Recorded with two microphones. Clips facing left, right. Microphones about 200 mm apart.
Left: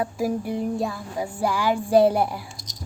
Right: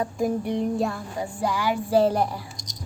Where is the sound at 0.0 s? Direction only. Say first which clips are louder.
Even; 5° left (ahead or behind).